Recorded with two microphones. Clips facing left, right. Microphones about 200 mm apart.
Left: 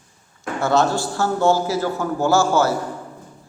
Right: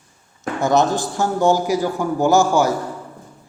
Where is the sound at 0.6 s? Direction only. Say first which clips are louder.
Right 1 dB; 15° right (ahead or behind).